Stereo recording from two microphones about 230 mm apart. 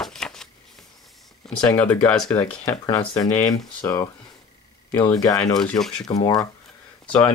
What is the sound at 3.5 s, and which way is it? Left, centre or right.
Speech, centre.